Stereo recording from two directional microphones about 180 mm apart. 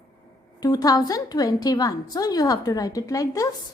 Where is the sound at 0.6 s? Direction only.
20° left (ahead or behind).